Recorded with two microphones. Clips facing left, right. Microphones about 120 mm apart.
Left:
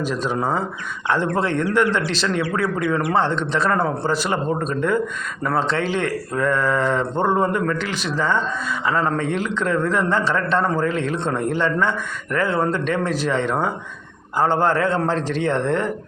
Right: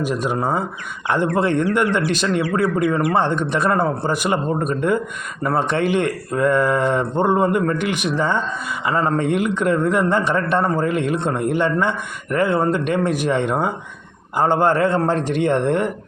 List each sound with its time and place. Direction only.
0.0 s a man's voice: 15° right (ahead or behind)